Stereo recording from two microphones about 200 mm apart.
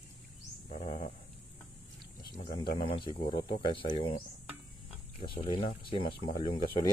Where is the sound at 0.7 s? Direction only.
35° left (ahead or behind).